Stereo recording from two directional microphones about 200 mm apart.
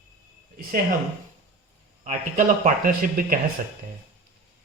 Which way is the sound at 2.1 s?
45° right (ahead or behind).